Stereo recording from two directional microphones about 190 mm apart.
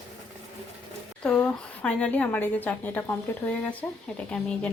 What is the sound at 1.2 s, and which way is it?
A woman's voice, 5° left (ahead or behind).